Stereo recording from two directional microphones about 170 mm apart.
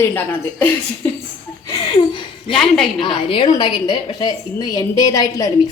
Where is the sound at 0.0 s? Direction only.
10° left (ahead or behind).